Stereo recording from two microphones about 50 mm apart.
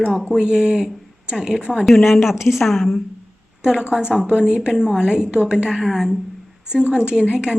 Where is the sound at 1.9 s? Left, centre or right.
Centre.